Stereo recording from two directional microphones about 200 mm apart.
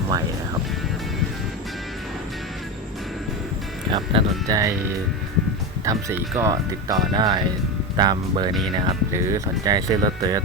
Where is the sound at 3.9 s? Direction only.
25° right (ahead or behind).